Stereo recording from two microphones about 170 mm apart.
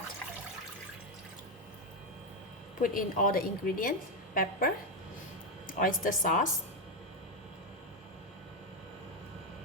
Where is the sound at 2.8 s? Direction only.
50° left (ahead or behind).